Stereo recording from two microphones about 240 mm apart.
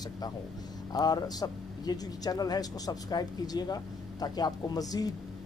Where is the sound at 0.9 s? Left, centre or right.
Centre.